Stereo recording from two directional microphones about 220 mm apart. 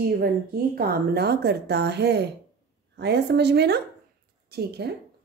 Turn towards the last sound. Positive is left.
turn(degrees=-45)  # may be behind; listen again after turning